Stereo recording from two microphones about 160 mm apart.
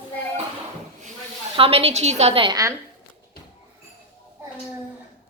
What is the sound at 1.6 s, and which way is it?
A woman's voice, 35° right (ahead or behind).